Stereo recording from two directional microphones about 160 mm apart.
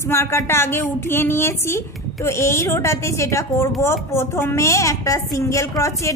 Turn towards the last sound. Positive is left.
turn(degrees=20)  # may be behind; listen again after turning